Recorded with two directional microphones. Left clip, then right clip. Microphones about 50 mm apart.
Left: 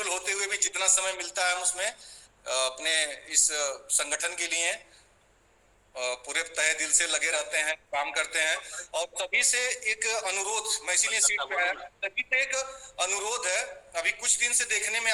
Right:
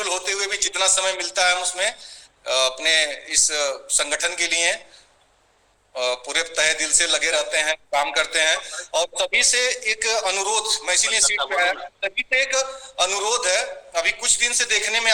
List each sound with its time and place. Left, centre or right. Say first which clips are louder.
0.0 s a man's voice: right 6 dB; right
5.9 s a man's voice: right 8 dB; right